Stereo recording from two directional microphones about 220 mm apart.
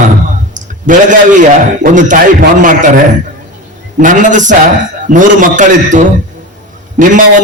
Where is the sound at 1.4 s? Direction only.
35° right (ahead or behind).